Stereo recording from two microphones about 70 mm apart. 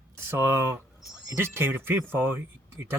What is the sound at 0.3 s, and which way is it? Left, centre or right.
Speech, right.